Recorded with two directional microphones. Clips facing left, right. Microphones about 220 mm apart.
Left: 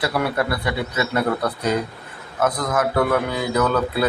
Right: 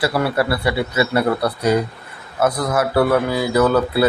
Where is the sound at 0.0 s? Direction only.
5° right (ahead or behind).